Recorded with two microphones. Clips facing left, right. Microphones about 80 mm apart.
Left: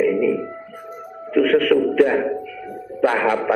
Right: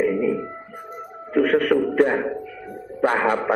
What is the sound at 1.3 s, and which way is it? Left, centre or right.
Music, right.